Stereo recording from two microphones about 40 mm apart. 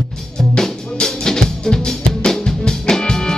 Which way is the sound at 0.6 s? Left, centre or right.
Centre.